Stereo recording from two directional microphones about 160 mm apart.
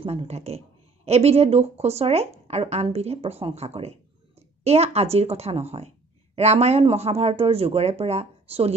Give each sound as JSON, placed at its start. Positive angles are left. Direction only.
{"t": 0.0, "sound": "speech", "side_deg": -40}